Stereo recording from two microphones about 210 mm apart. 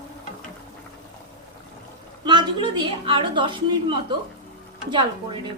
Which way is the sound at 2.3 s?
20° right (ahead or behind).